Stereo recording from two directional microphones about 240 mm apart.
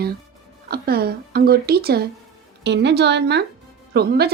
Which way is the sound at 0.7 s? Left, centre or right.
Right.